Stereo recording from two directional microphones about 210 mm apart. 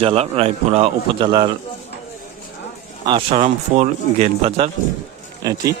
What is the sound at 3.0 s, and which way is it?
Speech, 25° right (ahead or behind).